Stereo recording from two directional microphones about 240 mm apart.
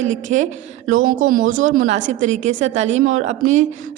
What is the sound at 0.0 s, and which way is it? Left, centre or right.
A woman's voice, right.